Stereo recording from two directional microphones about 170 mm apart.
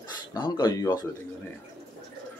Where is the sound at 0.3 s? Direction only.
25° left (ahead or behind).